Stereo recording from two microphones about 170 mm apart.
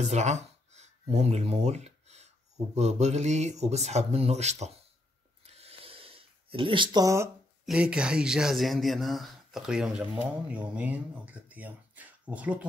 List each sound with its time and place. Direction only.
0.1 s speech: 40° right (ahead or behind)
5.4 s a sound: 35° right (ahead or behind); by 7.2 s 20° right (ahead or behind)
7.6 s speech: 5° right (ahead or behind)